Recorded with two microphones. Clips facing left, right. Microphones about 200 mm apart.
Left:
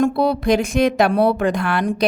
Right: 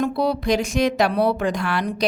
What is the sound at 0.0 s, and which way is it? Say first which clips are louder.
A woman's voice: left 4 dB; 55° left (ahead or behind).